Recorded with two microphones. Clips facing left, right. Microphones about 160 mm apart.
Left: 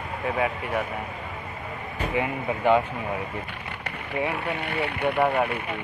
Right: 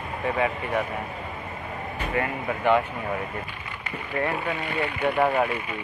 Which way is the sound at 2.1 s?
15° left (ahead or behind).